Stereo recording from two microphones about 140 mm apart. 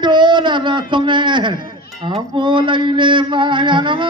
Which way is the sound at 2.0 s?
35° right (ahead or behind).